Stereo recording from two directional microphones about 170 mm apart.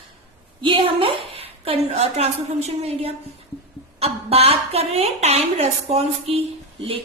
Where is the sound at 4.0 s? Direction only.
35° right (ahead or behind).